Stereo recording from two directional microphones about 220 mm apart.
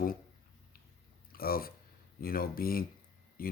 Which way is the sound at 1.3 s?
40° left (ahead or behind).